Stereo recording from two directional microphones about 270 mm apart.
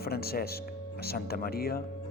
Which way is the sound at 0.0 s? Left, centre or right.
Left.